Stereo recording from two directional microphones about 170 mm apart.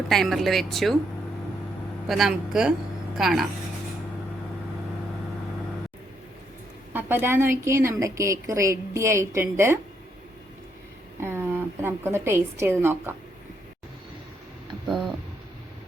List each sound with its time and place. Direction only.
0.1 s speech: centre (ahead or behind)
2.0 s speech: centre (ahead or behind)
6.9 s a woman's voice: 15° right (ahead or behind)
11.2 s a woman's voice: 15° right (ahead or behind)
14.8 s a sound: centre (ahead or behind)